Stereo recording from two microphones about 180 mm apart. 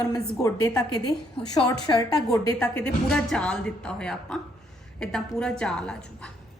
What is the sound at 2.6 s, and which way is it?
A woman's voice, 5° left (ahead or behind).